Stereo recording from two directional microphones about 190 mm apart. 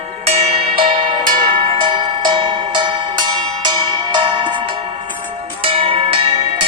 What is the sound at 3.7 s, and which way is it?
Cowbell, 25° right (ahead or behind).